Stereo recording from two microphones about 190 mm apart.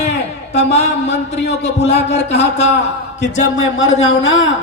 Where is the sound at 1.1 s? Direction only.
65° left (ahead or behind).